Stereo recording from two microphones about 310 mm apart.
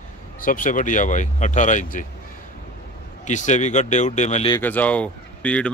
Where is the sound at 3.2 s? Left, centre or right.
Left; by 5.7 s centre.